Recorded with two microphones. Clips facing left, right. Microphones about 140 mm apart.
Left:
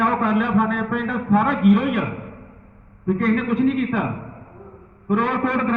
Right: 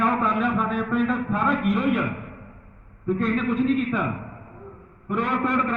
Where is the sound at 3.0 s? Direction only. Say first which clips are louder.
Left 4 dB; 75° left (ahead or behind).